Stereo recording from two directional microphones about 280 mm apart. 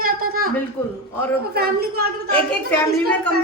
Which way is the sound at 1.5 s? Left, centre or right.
Right.